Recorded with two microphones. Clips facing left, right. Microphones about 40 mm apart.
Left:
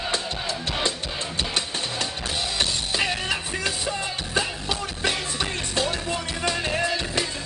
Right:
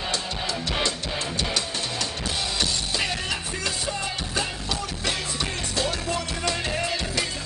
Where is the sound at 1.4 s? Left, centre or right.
Left.